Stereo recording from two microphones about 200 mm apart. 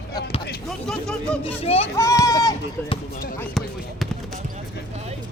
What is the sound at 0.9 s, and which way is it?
Speech, 5° left (ahead or behind).